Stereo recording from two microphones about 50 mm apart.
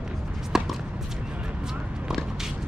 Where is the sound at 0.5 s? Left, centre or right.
Centre.